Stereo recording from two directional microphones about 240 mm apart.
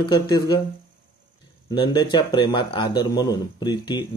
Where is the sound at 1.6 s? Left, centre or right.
Centre.